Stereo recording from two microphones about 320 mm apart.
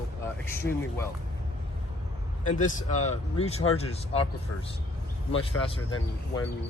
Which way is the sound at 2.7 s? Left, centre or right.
Left.